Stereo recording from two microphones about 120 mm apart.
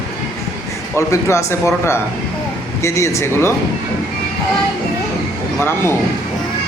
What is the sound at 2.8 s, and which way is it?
Speech, 25° left (ahead or behind).